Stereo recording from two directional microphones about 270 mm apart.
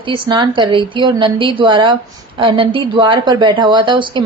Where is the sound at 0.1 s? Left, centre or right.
Centre.